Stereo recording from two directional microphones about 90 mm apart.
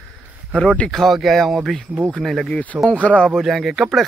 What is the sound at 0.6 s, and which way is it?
Speech, 15° left (ahead or behind).